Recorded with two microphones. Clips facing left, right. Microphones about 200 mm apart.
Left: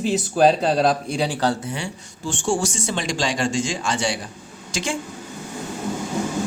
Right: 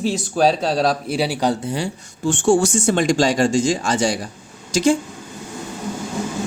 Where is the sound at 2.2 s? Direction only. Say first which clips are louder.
Right 7 dB; 55° right (ahead or behind); by 4.9 s 40° right (ahead or behind).